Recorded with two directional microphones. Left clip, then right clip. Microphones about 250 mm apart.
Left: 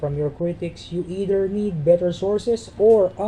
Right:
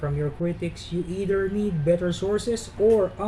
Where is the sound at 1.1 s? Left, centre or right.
Centre.